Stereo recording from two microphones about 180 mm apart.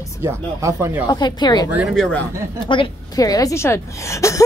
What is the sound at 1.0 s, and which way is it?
Speech, 20° left (ahead or behind).